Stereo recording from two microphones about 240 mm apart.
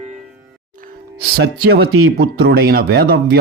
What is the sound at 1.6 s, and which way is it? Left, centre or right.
Speech, right.